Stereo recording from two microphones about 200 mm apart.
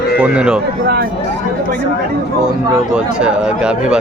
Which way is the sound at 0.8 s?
55° right (ahead or behind).